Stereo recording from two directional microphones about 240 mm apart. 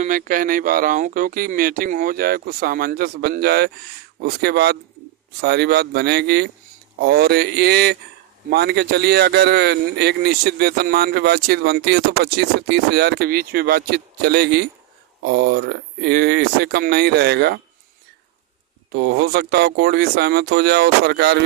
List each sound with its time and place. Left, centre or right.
0.0 s speech: right
18.9 s speech: right